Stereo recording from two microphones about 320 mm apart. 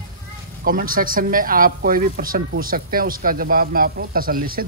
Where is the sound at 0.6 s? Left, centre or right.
Right.